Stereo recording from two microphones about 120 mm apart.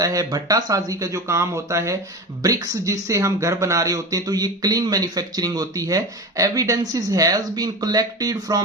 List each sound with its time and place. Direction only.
0.0 s speech: 30° right (ahead or behind)